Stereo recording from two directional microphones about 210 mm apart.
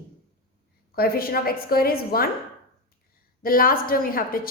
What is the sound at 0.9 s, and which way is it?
A woman's voice, 45° left (ahead or behind).